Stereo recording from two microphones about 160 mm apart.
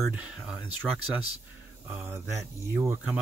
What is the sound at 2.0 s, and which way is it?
Speech, 15° right (ahead or behind).